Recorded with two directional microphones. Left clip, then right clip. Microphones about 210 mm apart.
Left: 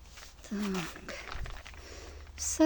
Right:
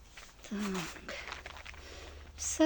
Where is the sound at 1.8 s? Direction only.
15° left (ahead or behind).